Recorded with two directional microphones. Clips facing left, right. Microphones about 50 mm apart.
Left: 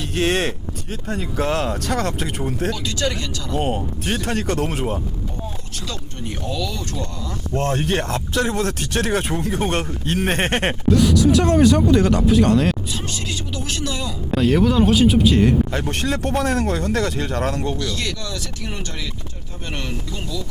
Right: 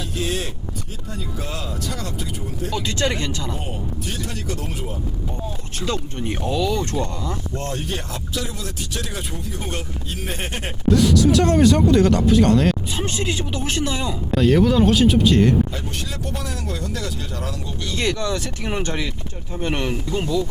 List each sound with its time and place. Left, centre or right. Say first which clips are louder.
0.2 s a sound: left 7 dB; left
1.1 s speech: left 9 dB; left
2.7 s speech: right 1 dB; right
3.5 s speech: left 7 dB; left
5.9 s speech: right 6 dB; right
7.5 s speech: left 12 dB; left
11.0 s speech: even; centre
13.0 s speech: right 4 dB; right
14.3 s speech: even; centre
15.7 s speech: left 7 dB; left
17.8 s speech: right 4 dB; right